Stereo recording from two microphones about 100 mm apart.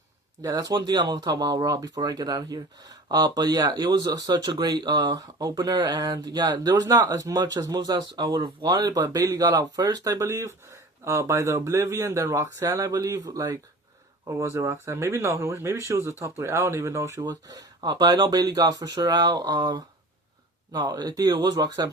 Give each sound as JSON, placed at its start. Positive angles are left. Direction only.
{"t": 0.4, "sound": "speech", "side_deg": -35}
{"t": 8.9, "sound": "speech", "side_deg": -35}